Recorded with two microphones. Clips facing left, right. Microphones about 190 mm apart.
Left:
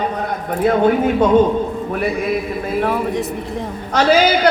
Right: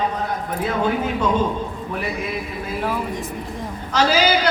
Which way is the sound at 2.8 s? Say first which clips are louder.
Left 4 dB; 60° left (ahead or behind).